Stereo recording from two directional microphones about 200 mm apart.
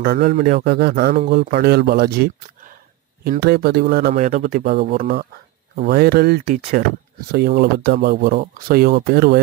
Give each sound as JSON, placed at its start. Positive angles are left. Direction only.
{"t": 0.0, "sound": "speech", "side_deg": -50}
{"t": 4.1, "sound": "speech", "side_deg": -40}